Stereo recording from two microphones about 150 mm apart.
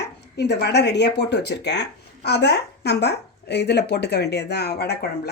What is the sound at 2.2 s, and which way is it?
A woman's voice, 90° left.